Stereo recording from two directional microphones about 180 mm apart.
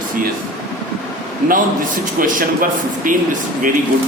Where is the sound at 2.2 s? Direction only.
50° right (ahead or behind).